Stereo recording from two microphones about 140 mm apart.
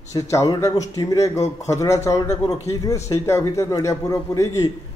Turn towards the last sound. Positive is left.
turn(degrees=25)  # may be behind; listen again after turning